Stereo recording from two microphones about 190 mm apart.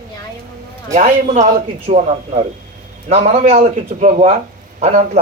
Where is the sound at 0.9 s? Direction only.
40° right (ahead or behind).